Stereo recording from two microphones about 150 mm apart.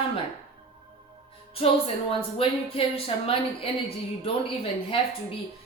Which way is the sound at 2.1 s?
40° left (ahead or behind).